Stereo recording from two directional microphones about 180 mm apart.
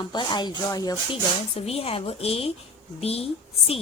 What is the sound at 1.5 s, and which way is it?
A woman's voice, 35° left (ahead or behind).